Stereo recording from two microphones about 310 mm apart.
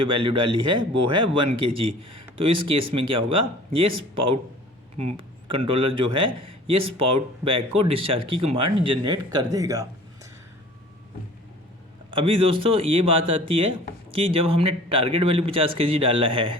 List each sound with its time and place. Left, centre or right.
0.1 s a man's voice: centre
0.4 s speech: right
1.3 s a man's voice: centre
12.1 s a man's voice: centre